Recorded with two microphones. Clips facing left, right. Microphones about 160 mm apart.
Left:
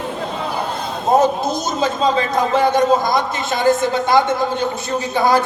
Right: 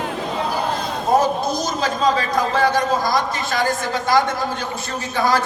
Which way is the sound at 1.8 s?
25° left (ahead or behind).